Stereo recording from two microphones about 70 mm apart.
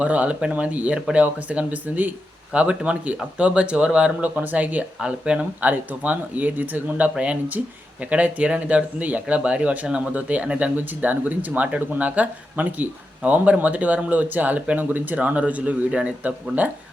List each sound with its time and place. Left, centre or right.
0.0 s speech: centre